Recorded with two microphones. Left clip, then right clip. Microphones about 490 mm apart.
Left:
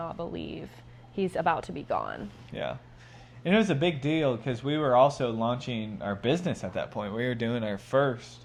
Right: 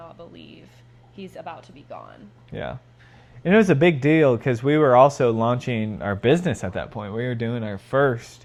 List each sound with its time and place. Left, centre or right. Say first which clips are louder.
0.0 s a sound: left 6 dB; left
1.1 s speech: left 9 dB; left
2.5 s speech: right 3 dB; right